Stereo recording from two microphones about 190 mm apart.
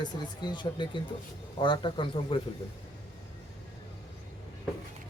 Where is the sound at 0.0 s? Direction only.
25° left (ahead or behind).